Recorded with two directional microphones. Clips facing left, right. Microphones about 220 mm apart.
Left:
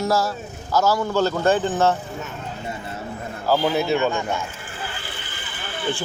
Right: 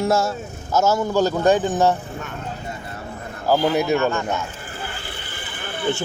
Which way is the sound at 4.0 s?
15° left (ahead or behind).